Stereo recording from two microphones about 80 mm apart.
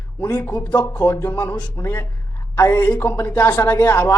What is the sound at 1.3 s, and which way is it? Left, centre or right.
Speech, left.